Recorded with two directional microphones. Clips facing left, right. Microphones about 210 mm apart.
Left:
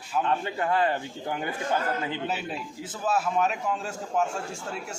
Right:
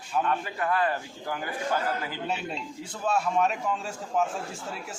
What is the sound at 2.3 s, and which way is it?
A man's voice, centre (ahead or behind).